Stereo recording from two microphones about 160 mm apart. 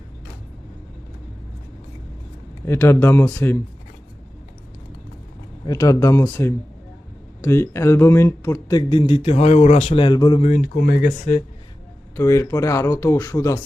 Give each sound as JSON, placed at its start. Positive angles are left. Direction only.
{"t": 2.6, "sound": "speech", "side_deg": 15}
{"t": 5.6, "sound": "speech", "side_deg": 20}
{"t": 10.4, "sound": "speech", "side_deg": 55}
{"t": 12.1, "sound": "speech", "side_deg": 15}